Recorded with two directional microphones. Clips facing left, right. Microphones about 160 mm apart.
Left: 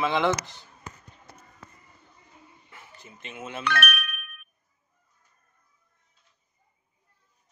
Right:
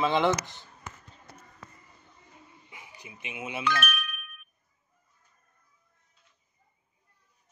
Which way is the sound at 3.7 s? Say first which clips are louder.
Left 2 dB; 65° left (ahead or behind).